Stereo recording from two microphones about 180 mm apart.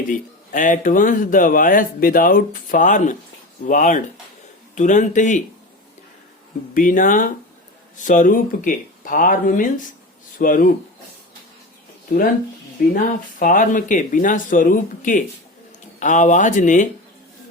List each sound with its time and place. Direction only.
0.1 s speech: 45° left (ahead or behind)
6.7 s speech: 50° left (ahead or behind)
12.1 s speech: 55° left (ahead or behind)